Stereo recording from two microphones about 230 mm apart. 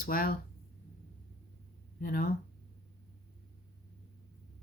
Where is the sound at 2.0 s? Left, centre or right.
Left.